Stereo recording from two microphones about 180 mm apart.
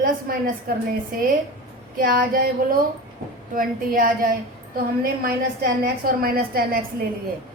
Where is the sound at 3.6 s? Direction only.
50° right (ahead or behind).